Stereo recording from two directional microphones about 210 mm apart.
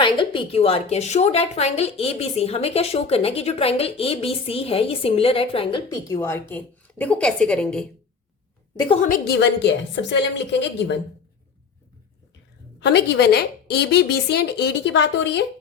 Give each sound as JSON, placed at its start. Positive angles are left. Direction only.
{"t": 0.0, "sound": "a woman's voice", "side_deg": 25}
{"t": 9.0, "sound": "a woman's voice", "side_deg": 40}
{"t": 12.8, "sound": "speech", "side_deg": 55}